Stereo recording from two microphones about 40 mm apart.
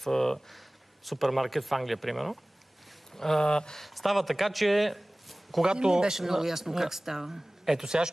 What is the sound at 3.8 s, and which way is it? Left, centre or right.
Speech, centre.